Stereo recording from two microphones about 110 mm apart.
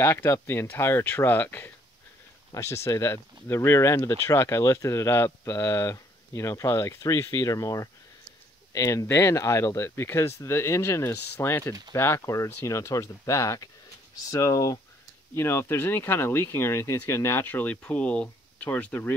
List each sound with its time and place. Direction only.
0.0 s speech: 25° left (ahead or behind)